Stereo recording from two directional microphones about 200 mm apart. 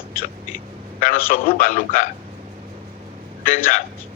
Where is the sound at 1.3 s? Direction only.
45° left (ahead or behind).